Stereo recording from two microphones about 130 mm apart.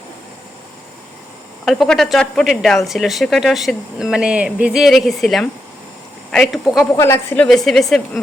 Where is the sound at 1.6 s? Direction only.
Centre (ahead or behind).